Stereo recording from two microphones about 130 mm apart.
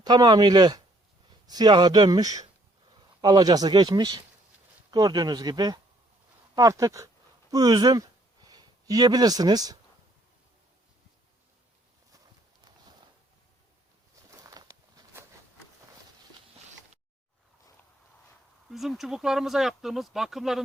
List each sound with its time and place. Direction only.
0.0 s speech: 30° right (ahead or behind)
14.3 s walk: 30° right (ahead or behind)
18.7 s speech: centre (ahead or behind)